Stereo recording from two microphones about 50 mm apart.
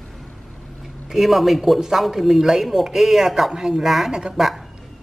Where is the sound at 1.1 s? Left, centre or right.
Centre.